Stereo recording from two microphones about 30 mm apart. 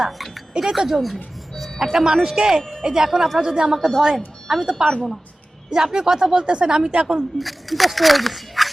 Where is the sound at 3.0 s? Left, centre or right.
Centre.